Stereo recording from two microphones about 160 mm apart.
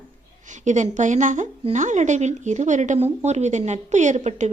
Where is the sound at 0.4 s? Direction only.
50° right (ahead or behind).